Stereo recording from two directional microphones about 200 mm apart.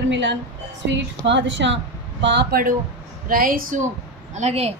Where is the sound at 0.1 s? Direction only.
65° right (ahead or behind).